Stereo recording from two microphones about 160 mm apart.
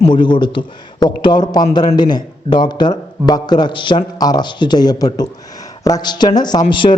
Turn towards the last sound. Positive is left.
turn(degrees=30)  # may be behind; listen again after turning